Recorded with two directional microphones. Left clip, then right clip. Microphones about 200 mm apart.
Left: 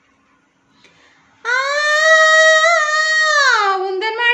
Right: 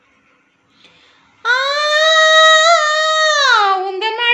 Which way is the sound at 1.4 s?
20° left (ahead or behind).